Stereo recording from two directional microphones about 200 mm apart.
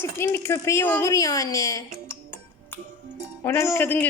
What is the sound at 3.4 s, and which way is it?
Speech, 10° left (ahead or behind).